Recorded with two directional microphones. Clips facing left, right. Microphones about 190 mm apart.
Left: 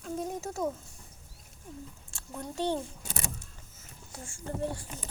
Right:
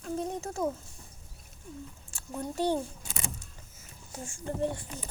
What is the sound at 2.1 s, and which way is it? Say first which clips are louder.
Speech: right 3 dB; 10° right (ahead or behind).